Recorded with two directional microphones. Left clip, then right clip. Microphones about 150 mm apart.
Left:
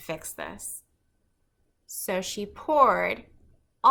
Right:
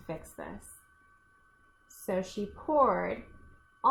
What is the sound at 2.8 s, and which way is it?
Speech, 30° left (ahead or behind).